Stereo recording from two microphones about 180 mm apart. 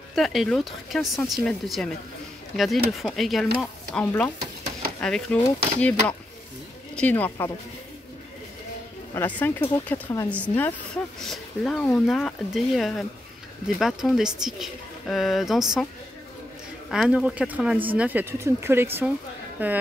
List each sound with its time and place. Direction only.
0.1 s speech: centre (ahead or behind)
9.1 s speech: 10° left (ahead or behind)
16.9 s speech: 5° right (ahead or behind)